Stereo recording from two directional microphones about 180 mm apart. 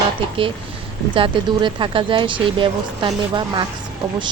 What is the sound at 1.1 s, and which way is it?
A woman's voice, 30° right (ahead or behind).